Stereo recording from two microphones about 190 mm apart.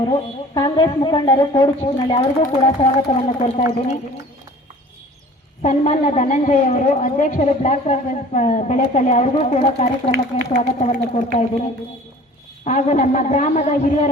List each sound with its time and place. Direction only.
0.0 s a woman's voice: 20° left (ahead or behind)
5.6 s a woman's voice: 40° left (ahead or behind)
12.6 s a woman's voice: 40° left (ahead or behind)